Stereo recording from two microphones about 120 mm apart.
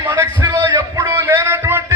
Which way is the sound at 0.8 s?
25° right (ahead or behind).